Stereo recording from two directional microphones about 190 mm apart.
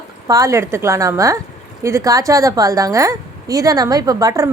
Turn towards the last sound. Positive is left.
turn(degrees=-15)  # may be behind; listen again after turning